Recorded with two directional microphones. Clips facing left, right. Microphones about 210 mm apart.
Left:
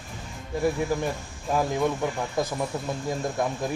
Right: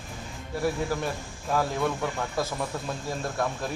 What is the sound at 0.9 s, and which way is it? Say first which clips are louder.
Speech: left 3 dB; 15° left (ahead or behind).